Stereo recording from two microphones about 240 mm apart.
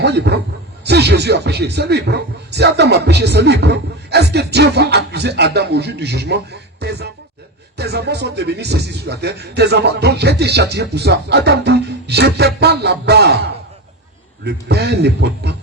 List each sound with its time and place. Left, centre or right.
0.0 s a man's voice: right